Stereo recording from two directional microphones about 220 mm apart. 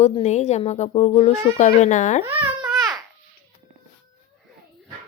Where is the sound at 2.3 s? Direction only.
10° right (ahead or behind).